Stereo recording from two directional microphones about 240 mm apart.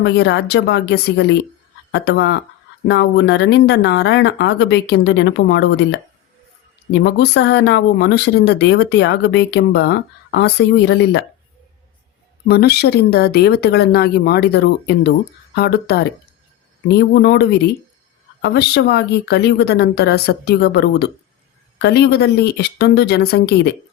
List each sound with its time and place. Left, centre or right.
0.0 s speech: left
7.0 s speech: left
12.5 s speech: left